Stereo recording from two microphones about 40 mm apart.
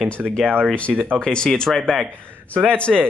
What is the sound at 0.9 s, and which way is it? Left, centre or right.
Speech, right.